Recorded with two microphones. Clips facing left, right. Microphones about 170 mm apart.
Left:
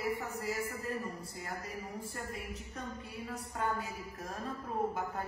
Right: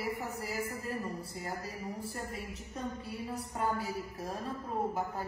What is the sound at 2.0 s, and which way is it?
A woman's voice, 35° right (ahead or behind).